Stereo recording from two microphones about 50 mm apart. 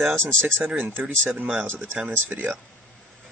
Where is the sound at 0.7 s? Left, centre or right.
Right.